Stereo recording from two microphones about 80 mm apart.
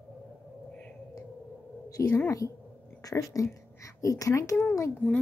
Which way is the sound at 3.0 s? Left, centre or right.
Left.